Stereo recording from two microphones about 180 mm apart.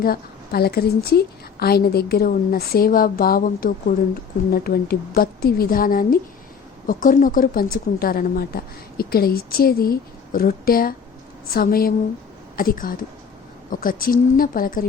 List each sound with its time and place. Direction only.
0.0 s speech: 55° left (ahead or behind)